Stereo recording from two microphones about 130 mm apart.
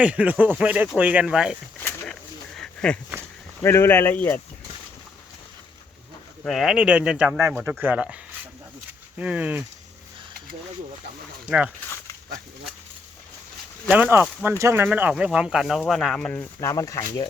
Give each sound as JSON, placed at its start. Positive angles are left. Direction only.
{"t": 0.0, "sound": "speech", "side_deg": -10}
{"t": 2.6, "sound": "a sound", "side_deg": 10}
{"t": 3.6, "sound": "speech", "side_deg": 20}
{"t": 6.4, "sound": "speech", "side_deg": 0}
{"t": 13.8, "sound": "speech", "side_deg": -15}
{"t": 16.6, "sound": "speech", "side_deg": 25}